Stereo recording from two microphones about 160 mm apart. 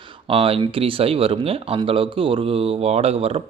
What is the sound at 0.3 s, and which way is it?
Speech, 35° right (ahead or behind).